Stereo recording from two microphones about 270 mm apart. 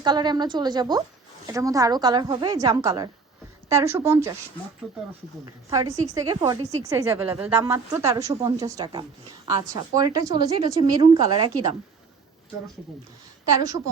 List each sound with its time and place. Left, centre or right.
0.0 s a woman's voice: centre